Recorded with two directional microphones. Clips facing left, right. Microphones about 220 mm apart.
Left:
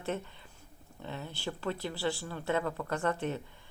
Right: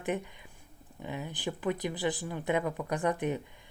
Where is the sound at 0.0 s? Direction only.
15° right (ahead or behind).